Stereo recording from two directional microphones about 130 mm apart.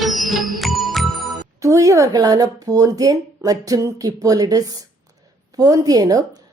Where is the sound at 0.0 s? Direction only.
Centre (ahead or behind).